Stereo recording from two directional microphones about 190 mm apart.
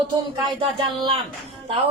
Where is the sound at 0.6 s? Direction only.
25° right (ahead or behind).